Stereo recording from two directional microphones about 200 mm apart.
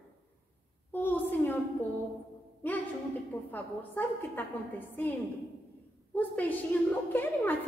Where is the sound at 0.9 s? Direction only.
10° left (ahead or behind).